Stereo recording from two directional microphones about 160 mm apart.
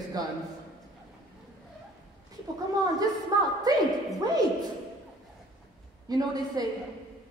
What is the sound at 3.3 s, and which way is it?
Speech, 25° right (ahead or behind).